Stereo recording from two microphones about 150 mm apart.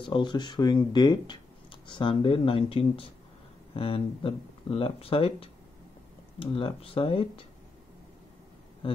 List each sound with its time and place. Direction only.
0.0 s speech: 30° left (ahead or behind)